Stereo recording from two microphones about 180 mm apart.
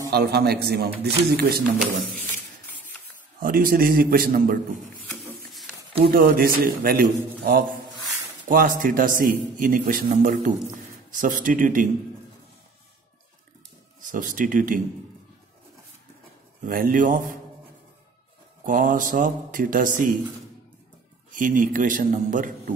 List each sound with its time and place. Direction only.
0.1 s a man's voice: 65° right (ahead or behind)
1.8 s speech: centre (ahead or behind)
3.3 s a man's voice: 50° right (ahead or behind)
6.0 s a man's voice: 55° right (ahead or behind)
14.1 s a man's voice: 45° right (ahead or behind)
16.6 s a man's voice: 50° right (ahead or behind)
18.7 s a man's voice: 45° right (ahead or behind)
21.3 s a man's voice: 45° right (ahead or behind)